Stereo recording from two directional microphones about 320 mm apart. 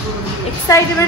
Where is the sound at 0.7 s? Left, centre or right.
Centre.